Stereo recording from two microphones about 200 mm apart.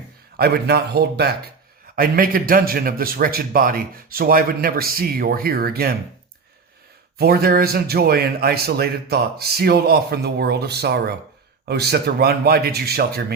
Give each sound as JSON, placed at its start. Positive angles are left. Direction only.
{"t": 0.3, "sound": "a man's voice", "side_deg": -50}
{"t": 7.2, "sound": "a man's voice", "side_deg": -50}